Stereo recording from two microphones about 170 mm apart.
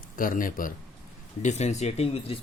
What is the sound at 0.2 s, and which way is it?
Speech, 55° left (ahead or behind).